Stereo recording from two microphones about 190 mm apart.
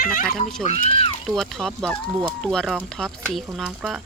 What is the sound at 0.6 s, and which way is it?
Speech, 30° left (ahead or behind).